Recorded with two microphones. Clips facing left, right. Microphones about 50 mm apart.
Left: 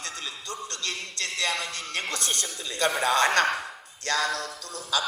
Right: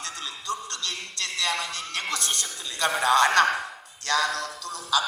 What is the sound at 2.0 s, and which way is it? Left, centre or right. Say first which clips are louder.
Music: right 2 dB; left.